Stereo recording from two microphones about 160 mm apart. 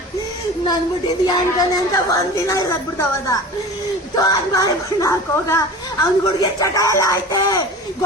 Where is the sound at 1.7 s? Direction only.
20° left (ahead or behind).